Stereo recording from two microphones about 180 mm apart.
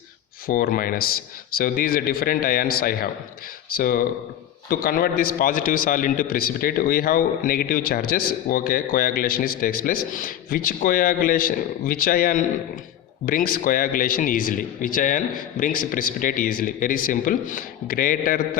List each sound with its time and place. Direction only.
0.4 s a man's voice: 50° left (ahead or behind)